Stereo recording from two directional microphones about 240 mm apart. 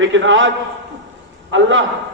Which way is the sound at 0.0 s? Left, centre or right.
Right.